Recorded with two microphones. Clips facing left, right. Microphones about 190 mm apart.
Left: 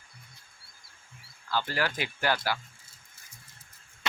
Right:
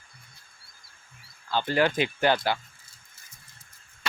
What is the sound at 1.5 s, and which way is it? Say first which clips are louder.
Speech: right 6 dB; 20° right (ahead or behind).